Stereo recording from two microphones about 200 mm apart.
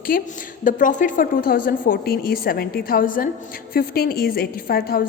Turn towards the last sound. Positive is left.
turn(degrees=50)  # may be behind; listen again after turning